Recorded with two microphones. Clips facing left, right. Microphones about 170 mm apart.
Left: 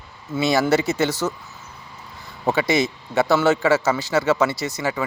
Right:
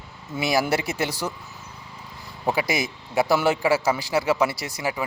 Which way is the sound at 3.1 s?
10° right (ahead or behind).